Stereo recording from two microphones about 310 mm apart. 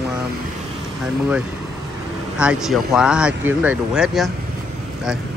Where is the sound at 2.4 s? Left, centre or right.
Centre.